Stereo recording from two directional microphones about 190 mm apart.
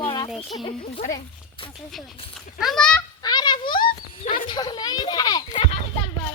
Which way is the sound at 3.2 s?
20° left (ahead or behind).